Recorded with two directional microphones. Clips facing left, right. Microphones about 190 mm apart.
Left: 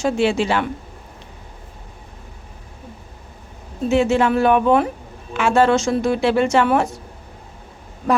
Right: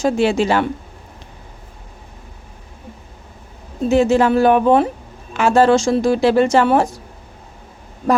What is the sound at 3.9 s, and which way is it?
Speech, 40° right (ahead or behind).